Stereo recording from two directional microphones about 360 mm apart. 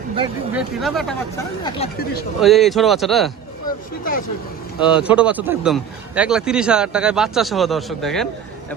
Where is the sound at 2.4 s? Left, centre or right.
Centre.